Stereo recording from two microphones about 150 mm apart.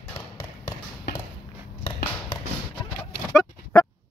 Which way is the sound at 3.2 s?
15° left (ahead or behind).